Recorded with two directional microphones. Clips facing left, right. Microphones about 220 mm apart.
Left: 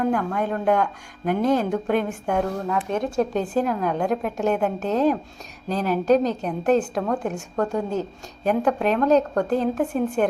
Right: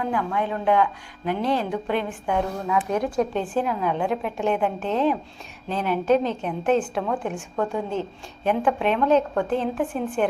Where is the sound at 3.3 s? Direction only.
40° left (ahead or behind).